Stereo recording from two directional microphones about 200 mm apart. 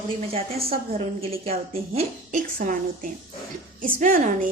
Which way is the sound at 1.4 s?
30° right (ahead or behind).